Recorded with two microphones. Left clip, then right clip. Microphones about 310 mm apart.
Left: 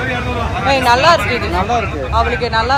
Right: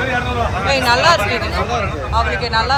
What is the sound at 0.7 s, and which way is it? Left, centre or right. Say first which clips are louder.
Speech: left 3 dB; centre.